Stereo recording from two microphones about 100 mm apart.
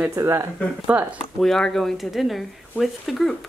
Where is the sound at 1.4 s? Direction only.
5° left (ahead or behind).